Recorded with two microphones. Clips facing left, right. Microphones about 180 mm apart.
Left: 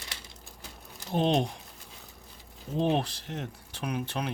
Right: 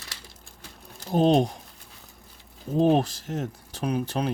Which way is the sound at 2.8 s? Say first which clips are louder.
Right 6 dB; 40° right (ahead or behind).